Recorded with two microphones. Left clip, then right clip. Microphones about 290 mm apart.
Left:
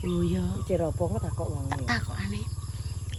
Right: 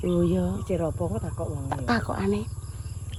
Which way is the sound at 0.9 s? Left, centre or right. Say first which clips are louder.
Even; right.